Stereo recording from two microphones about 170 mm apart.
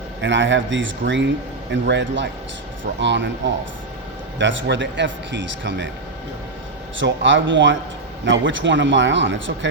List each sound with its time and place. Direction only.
0.2 s a man's voice: 90° right
7.0 s a man's voice: 90° right